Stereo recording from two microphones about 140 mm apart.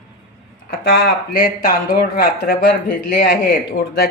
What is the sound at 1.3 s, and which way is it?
Speech, 85° left.